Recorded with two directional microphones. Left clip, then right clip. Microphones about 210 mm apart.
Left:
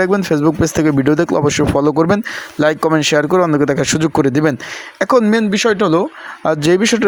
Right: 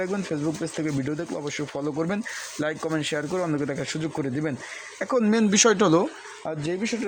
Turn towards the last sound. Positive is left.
turn(degrees=45)  # may be behind; listen again after turning